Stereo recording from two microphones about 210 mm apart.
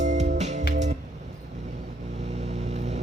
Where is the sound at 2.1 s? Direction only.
35° right (ahead or behind).